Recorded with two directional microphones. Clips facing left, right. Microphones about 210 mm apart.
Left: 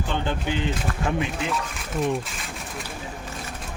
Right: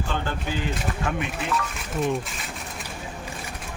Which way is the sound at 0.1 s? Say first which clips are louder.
Left 4 dB; 20° left (ahead or behind).